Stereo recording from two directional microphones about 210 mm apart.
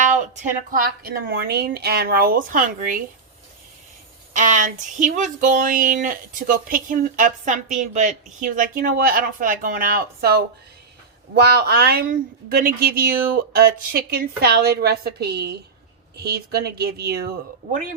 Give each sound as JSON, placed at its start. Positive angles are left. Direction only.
{"t": 0.7, "sound": "a woman's voice", "side_deg": -45}
{"t": 4.4, "sound": "speech", "side_deg": -35}
{"t": 11.4, "sound": "a woman's voice", "side_deg": -50}